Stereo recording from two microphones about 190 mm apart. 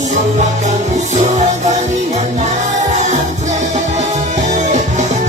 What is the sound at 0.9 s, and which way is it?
Music, 40° right (ahead or behind).